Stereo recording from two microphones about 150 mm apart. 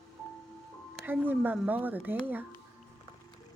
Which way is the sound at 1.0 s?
15° right (ahead or behind).